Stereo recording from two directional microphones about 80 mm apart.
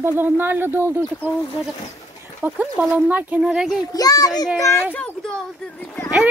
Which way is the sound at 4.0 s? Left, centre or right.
Left.